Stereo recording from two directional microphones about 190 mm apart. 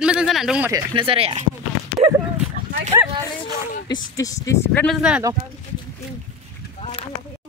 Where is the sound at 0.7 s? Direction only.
25° right (ahead or behind).